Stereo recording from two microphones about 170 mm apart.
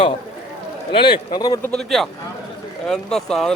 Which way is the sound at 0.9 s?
30° left (ahead or behind).